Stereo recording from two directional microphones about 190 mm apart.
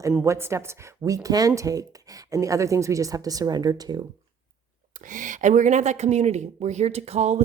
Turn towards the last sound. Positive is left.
turn(degrees=-35)  # may be behind; listen again after turning